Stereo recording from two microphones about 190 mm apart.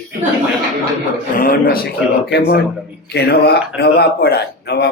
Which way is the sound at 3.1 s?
60° left (ahead or behind).